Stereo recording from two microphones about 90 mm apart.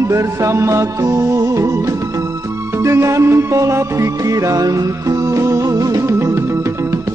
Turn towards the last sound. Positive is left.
turn(degrees=-30)  # may be behind; listen again after turning